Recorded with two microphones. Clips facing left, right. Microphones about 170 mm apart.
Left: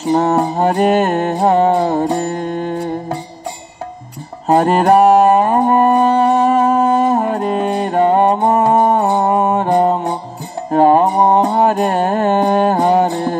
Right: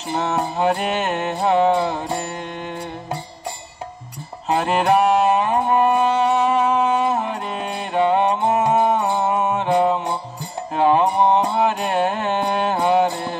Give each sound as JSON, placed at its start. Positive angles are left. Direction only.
{"t": 0.1, "sound": "music", "side_deg": 40}
{"t": 4.5, "sound": "music", "side_deg": 45}